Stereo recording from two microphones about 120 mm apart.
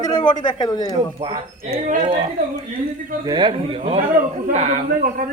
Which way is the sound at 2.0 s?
45° right (ahead or behind).